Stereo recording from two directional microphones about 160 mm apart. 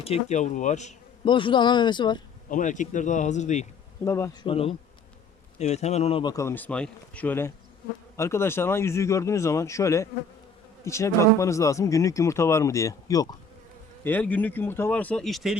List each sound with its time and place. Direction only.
0.0 s speech: 40° left (ahead or behind)
1.2 s speech: 30° left (ahead or behind)
2.5 s speech: 50° left (ahead or behind)
4.0 s speech: 20° left (ahead or behind)
4.4 s bee: 35° left (ahead or behind)
5.5 s speech: 45° left (ahead or behind)
6.3 s speech: 15° left (ahead or behind)
14.0 s speech: 10° left (ahead or behind)